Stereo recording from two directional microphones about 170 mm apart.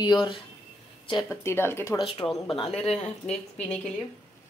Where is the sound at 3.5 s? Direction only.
5° left (ahead or behind).